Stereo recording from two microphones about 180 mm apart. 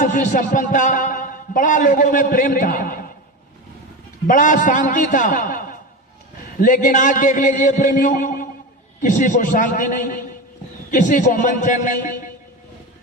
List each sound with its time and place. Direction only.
0.0 s a man's voice: 45° left (ahead or behind)
4.3 s a man's voice: 45° left (ahead or behind)